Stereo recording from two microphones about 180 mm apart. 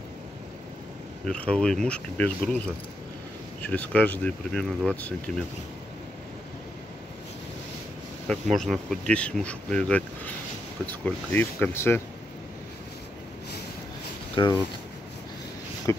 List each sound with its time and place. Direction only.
1.2 s speech: 5° left (ahead or behind)
3.6 s speech: 10° left (ahead or behind)
8.3 s speech: centre (ahead or behind)
14.3 s speech: 25° left (ahead or behind)
15.9 s a sound: 15° left (ahead or behind)